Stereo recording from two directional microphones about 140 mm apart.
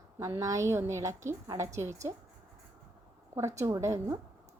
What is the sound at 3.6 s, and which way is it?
Speech, 20° right (ahead or behind).